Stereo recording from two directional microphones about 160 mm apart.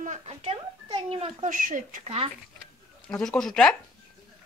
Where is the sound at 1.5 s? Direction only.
55° right (ahead or behind).